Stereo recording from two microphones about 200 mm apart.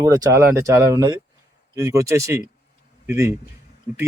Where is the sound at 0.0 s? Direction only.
15° right (ahead or behind).